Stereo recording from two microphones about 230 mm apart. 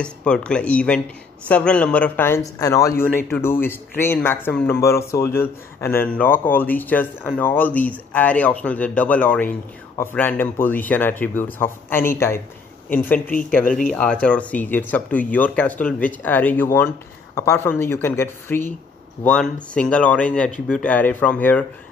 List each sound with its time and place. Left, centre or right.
0.0 s a man's voice: centre
13.3 s speech: left
14.2 s a man's voice: centre